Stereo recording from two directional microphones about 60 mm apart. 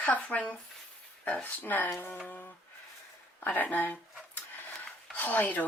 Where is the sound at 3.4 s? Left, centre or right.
Left.